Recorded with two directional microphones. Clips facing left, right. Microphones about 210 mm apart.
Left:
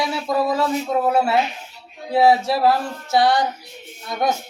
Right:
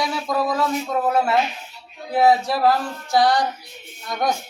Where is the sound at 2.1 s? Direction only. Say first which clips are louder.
Left 1 dB; 30° left (ahead or behind).